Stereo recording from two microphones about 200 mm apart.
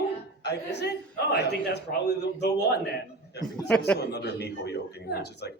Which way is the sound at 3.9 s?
55° left (ahead or behind).